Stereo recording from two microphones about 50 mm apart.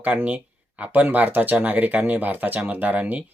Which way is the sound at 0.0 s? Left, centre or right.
Right.